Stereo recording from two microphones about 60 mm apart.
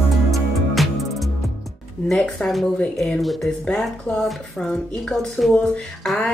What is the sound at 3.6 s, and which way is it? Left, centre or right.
Speech, centre.